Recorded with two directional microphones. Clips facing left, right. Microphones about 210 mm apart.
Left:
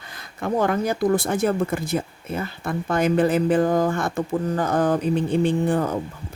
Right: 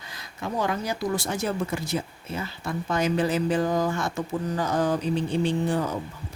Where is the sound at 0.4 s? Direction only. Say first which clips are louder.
Left 6 dB; 55° left (ahead or behind).